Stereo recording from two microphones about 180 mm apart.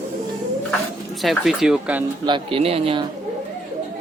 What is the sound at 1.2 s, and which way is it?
Speech, centre (ahead or behind).